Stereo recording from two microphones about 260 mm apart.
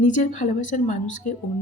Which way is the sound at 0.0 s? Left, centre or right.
Left.